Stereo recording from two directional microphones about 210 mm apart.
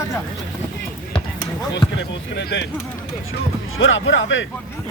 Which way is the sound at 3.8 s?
65° left (ahead or behind).